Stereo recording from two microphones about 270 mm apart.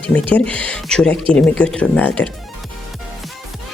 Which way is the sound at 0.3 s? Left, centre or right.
Centre.